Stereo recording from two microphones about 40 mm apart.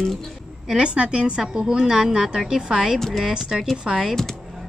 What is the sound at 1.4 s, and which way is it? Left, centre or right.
A woman's voice, centre.